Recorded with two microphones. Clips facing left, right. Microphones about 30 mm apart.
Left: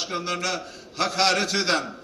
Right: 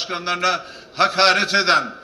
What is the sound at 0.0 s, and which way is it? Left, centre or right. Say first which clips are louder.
A man's voice: right 6 dB; right.